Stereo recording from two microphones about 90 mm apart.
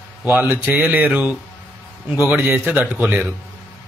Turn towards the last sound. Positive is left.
turn(degrees=-15)  # may be behind; listen again after turning